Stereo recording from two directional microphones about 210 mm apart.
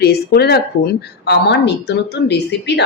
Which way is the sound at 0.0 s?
50° left (ahead or behind).